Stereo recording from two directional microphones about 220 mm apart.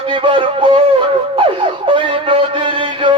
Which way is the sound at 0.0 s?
25° right (ahead or behind).